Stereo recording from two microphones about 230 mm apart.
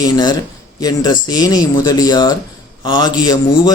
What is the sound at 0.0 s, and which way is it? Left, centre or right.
A man's voice, centre.